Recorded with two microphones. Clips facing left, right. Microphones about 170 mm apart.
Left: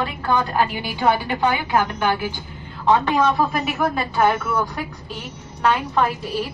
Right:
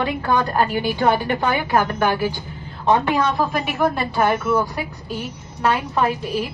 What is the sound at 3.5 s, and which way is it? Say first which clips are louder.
Speech: right 2 dB; centre (ahead or behind).